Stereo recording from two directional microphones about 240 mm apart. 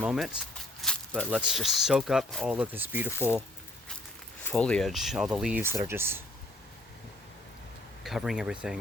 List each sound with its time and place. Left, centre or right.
0.0 s speech: centre
4.4 s speech: centre
8.0 s speech: centre